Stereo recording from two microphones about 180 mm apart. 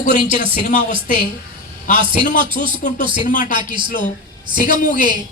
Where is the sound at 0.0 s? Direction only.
45° left (ahead or behind).